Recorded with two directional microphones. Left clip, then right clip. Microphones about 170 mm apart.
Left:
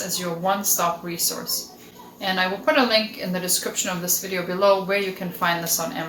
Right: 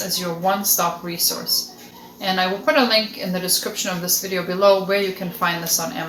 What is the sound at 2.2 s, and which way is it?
A woman's voice, 10° right (ahead or behind).